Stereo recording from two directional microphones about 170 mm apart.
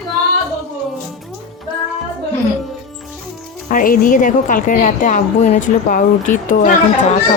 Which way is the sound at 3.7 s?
55° left (ahead or behind).